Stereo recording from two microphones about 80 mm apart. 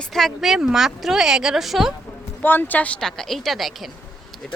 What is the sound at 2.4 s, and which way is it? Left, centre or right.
Speech, left.